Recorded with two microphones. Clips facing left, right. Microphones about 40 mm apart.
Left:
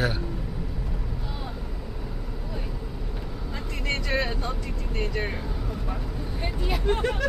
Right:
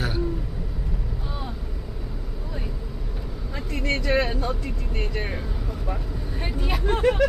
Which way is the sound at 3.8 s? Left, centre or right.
Right.